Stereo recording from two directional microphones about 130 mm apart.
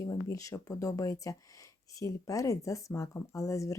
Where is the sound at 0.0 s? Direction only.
25° left (ahead or behind).